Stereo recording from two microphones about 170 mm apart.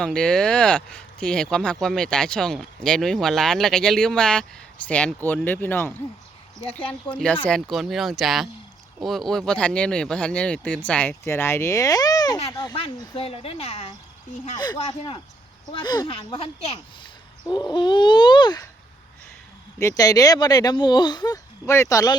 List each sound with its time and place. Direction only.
0.0 s speech: 5° left (ahead or behind); by 12.7 s 20° left (ahead or behind)
12.7 s speech: 35° left (ahead or behind)
14.8 s speech: 35° left (ahead or behind)
15.7 s speech: 25° left (ahead or behind)
19.8 s speech: 20° left (ahead or behind)